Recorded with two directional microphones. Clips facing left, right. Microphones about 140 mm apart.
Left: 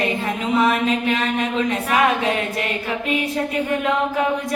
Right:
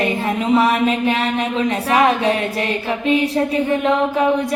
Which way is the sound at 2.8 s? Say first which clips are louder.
Right 8 dB; 25° right (ahead or behind).